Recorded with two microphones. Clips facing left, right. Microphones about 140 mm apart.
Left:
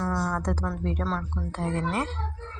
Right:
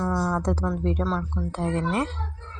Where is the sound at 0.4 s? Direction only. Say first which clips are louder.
Right 4 dB; 20° right (ahead or behind).